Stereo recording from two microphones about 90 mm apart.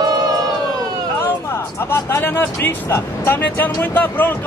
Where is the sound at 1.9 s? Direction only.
25° left (ahead or behind).